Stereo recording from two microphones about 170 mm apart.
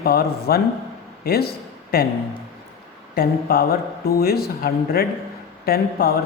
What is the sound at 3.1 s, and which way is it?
Speech, 65° left (ahead or behind).